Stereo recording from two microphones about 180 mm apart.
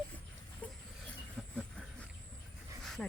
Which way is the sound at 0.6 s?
10° left (ahead or behind).